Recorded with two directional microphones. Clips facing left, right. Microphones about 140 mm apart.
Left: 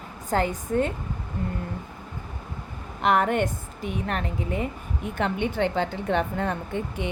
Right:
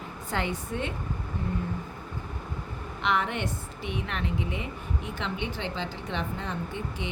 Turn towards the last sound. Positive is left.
turn(degrees=55)  # may be behind; listen again after turning